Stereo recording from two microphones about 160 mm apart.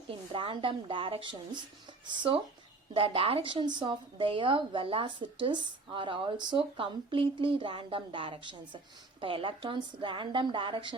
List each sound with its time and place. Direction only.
0.1 s a woman's voice: 35° right (ahead or behind)